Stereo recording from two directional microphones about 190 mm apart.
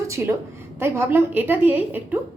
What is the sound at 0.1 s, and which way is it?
A woman's voice, 15° right (ahead or behind).